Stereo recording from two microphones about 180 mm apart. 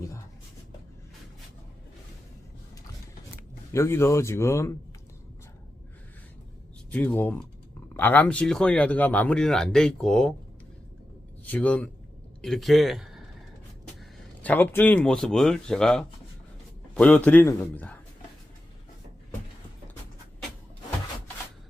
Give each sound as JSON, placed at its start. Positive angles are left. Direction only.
{"t": 3.7, "sound": "a man's voice", "side_deg": 15}
{"t": 6.9, "sound": "a man's voice", "side_deg": 10}
{"t": 11.5, "sound": "a man's voice", "side_deg": 10}
{"t": 14.4, "sound": "a man's voice", "side_deg": 10}